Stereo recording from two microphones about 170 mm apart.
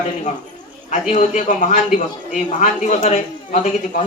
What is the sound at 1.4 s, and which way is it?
A man's voice, 45° left (ahead or behind).